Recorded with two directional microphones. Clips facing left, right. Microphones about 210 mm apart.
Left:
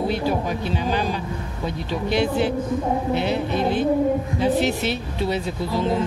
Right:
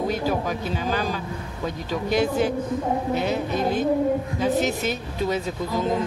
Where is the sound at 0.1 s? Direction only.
45° right (ahead or behind).